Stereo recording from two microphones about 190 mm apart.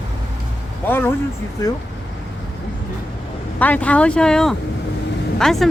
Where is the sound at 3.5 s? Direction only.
10° left (ahead or behind).